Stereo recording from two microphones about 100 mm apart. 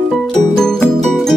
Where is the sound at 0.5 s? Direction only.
5° left (ahead or behind).